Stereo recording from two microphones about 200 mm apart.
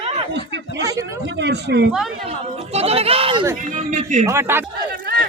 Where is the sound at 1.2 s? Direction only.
60° right (ahead or behind).